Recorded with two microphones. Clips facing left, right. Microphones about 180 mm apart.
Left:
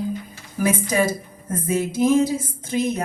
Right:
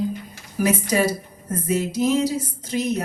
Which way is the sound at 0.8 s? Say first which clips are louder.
Even; 50° left (ahead or behind).